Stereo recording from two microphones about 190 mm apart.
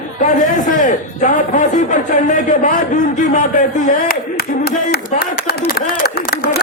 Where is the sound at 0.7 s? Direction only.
40° left (ahead or behind).